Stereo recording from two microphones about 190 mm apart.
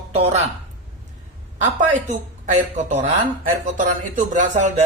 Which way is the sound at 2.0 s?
40° right (ahead or behind).